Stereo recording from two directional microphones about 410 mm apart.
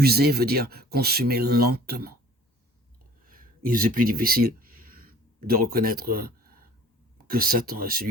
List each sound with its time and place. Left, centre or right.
0.0 s speech: right
3.2 s a sound: centre
7.3 s speech: right